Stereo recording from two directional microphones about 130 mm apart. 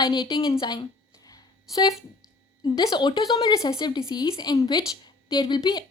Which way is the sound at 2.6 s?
30° left (ahead or behind).